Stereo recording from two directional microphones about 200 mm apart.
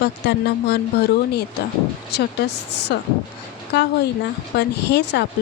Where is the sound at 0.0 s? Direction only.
55° left (ahead or behind).